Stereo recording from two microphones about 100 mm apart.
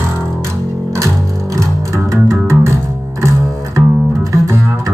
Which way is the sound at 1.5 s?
30° right (ahead or behind).